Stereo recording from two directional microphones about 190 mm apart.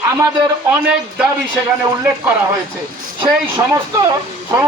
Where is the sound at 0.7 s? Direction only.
5° right (ahead or behind).